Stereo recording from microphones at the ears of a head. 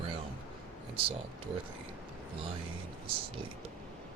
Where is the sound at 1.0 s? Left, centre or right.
Right.